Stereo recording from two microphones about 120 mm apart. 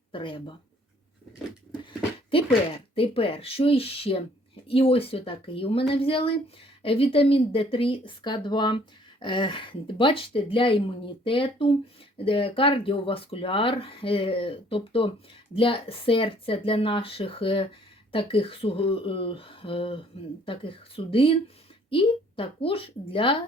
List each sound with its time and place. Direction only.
0.1 s speech: 45° left (ahead or behind)
1.8 s a sound: 45° left (ahead or behind)
2.9 s speech: 50° left (ahead or behind)